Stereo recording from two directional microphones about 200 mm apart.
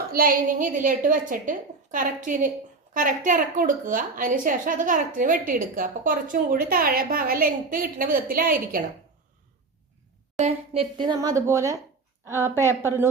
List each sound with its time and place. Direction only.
0.1 s a woman's voice: 45° right (ahead or behind)
10.3 s speech: 30° right (ahead or behind); by 12.6 s 10° right (ahead or behind)